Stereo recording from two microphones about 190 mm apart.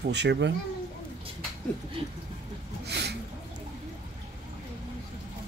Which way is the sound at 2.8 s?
60° right (ahead or behind).